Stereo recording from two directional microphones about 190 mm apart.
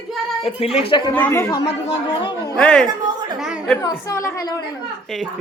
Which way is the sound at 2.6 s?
5° left (ahead or behind).